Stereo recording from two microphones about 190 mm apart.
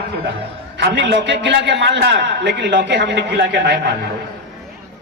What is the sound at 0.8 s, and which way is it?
A man's voice, 65° right (ahead or behind).